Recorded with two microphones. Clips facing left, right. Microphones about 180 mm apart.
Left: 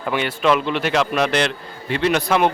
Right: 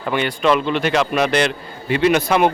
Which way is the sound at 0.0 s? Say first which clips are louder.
Right 1 dB; centre (ahead or behind).